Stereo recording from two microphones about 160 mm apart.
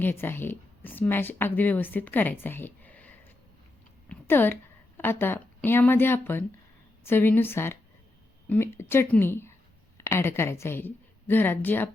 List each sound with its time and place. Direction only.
0.0 s speech: 15° left (ahead or behind)
4.1 s a sound: 15° left (ahead or behind)
4.9 s a woman's voice: 15° left (ahead or behind)